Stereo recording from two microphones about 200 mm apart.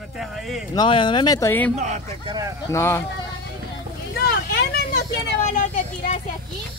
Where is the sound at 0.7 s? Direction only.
25° left (ahead or behind).